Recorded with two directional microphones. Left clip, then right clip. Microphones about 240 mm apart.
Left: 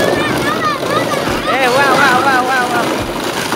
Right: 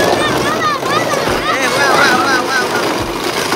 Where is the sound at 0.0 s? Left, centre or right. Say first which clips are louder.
Right 1 dB; right.